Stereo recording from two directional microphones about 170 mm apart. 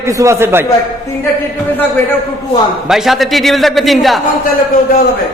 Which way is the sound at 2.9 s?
Centre (ahead or behind).